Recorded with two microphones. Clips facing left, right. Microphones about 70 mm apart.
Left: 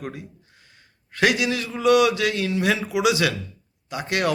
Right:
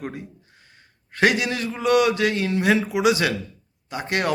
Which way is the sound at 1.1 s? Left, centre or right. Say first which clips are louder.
Right 1 dB; right.